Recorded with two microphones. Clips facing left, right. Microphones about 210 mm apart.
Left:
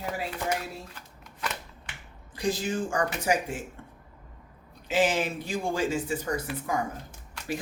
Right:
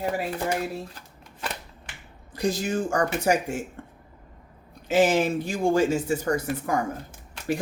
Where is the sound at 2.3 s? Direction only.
40° right (ahead or behind).